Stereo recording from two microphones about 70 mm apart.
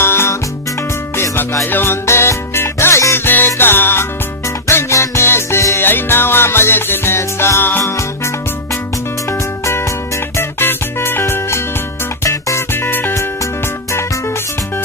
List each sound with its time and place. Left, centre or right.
0.0 s music: left
10.3 s music: left